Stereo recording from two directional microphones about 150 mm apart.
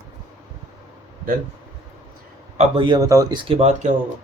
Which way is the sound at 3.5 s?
45° right (ahead or behind).